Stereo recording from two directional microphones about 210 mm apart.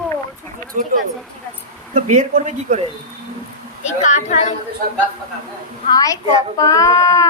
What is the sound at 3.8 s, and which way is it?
Speech, 35° left (ahead or behind).